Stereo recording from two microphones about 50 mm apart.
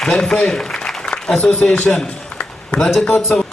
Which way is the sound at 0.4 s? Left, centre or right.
Centre.